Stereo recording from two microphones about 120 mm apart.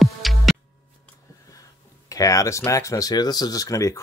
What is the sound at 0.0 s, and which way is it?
Music, centre (ahead or behind).